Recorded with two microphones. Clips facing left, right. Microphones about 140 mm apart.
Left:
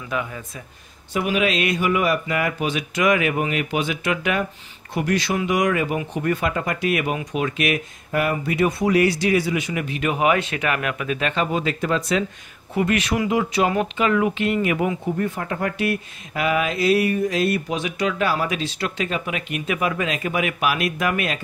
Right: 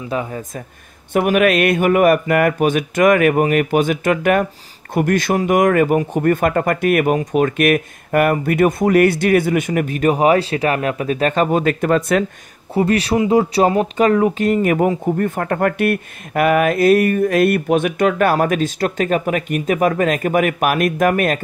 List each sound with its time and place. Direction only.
0.1 s speech: 35° right (ahead or behind)
1.1 s speech: 55° right (ahead or behind)
12.7 s speech: 35° right (ahead or behind)